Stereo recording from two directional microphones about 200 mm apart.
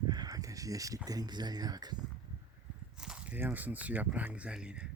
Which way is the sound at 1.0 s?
20° right (ahead or behind).